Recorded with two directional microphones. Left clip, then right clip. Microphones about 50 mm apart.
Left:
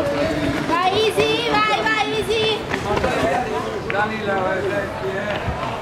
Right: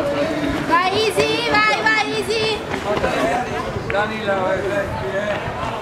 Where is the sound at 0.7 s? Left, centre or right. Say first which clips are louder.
Right 1 dB; centre.